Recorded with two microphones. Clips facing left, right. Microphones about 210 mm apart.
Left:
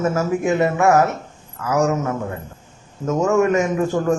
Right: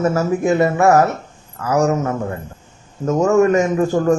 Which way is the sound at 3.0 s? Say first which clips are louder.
Right 3 dB; 35° right (ahead or behind).